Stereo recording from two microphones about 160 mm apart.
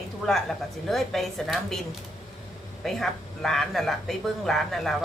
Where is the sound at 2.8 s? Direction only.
5° left (ahead or behind).